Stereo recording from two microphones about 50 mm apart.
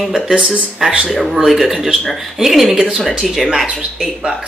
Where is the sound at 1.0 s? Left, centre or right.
Centre.